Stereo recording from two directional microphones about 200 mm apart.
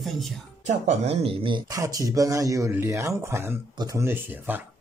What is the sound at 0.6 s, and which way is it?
Speech, 35° right (ahead or behind).